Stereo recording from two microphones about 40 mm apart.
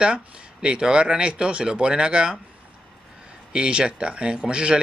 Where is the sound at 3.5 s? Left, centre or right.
Right.